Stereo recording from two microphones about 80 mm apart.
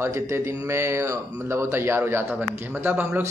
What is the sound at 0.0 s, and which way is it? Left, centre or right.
Speech, right.